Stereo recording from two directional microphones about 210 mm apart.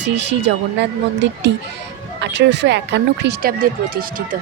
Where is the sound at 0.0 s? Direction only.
55° right (ahead or behind).